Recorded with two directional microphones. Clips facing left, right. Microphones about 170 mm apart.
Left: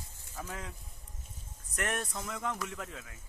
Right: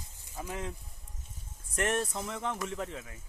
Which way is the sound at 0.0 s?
15° right (ahead or behind).